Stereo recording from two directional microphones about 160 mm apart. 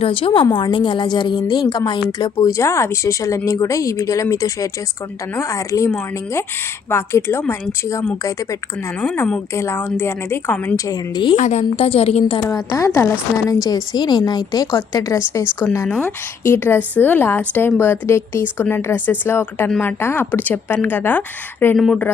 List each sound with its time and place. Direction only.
0.0 s a woman's voice: 30° left (ahead or behind); by 10.8 s 10° left (ahead or behind)
10.8 s a woman's voice: 30° left (ahead or behind)
11.3 s a woman's voice: 45° left (ahead or behind)
12.5 s a woman's voice: 20° left (ahead or behind)
21.8 s speech: centre (ahead or behind)